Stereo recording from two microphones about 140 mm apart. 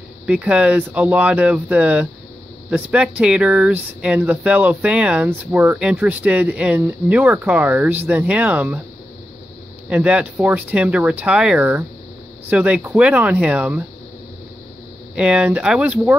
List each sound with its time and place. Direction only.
0.3 s speech: 10° right (ahead or behind)
9.8 s speech: 10° right (ahead or behind)
15.1 s speech: 5° right (ahead or behind)